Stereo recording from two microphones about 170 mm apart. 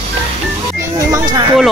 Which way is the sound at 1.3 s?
25° right (ahead or behind).